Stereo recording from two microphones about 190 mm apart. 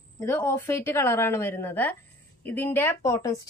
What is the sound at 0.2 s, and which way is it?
Speech, 15° left (ahead or behind).